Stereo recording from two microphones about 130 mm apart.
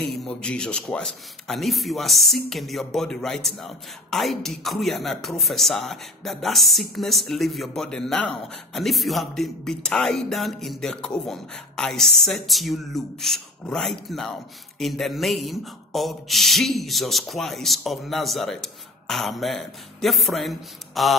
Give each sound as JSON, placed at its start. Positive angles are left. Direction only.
{"t": 0.0, "sound": "a man's voice", "side_deg": 5}